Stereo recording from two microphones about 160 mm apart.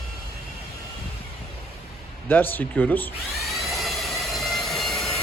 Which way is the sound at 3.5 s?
Centre (ahead or behind).